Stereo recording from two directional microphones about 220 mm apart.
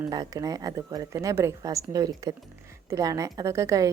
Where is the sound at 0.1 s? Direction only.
15° right (ahead or behind).